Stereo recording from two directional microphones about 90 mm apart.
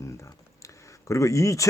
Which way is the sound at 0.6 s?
35° left (ahead or behind).